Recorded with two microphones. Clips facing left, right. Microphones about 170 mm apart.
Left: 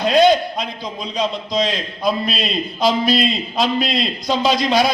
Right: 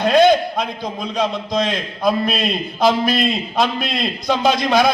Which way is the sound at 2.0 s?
50° right (ahead or behind).